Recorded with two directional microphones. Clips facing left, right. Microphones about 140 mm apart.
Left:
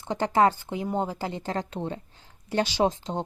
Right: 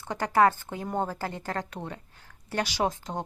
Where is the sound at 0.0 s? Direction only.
20° left (ahead or behind).